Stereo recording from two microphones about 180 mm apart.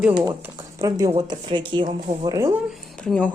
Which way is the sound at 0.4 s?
20° right (ahead or behind).